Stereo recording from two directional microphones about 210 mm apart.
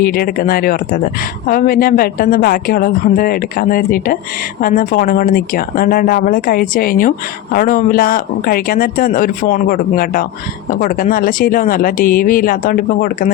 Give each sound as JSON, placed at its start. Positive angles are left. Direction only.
{"t": 0.0, "sound": "speech", "side_deg": 45}